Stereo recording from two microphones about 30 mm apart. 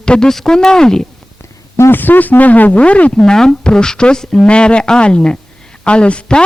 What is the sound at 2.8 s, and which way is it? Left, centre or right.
Speech, left.